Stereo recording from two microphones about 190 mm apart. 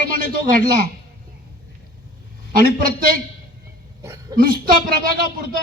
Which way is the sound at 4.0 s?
15° right (ahead or behind).